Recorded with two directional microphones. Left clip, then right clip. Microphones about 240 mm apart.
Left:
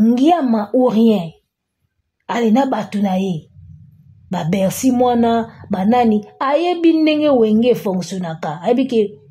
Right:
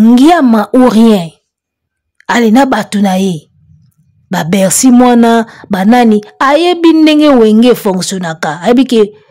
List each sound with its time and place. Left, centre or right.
0.0 s speech: right